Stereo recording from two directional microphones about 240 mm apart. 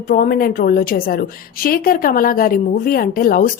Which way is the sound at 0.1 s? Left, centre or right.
Left.